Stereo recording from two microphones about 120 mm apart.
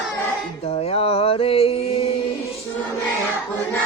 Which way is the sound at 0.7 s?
55° left (ahead or behind).